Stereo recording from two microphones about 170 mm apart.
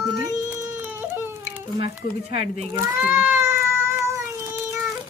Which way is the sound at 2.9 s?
10° right (ahead or behind).